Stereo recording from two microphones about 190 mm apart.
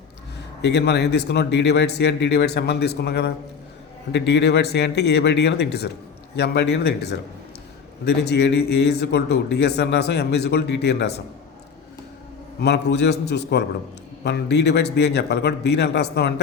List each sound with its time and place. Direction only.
0.6 s speech: 60° left (ahead or behind)
12.5 s speech: 60° left (ahead or behind)